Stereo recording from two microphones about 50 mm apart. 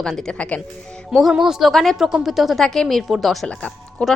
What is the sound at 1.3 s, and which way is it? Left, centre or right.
Speech, centre.